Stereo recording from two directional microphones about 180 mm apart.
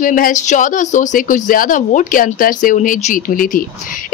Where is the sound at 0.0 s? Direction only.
50° left (ahead or behind).